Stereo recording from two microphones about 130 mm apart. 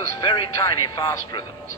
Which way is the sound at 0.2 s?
35° left (ahead or behind).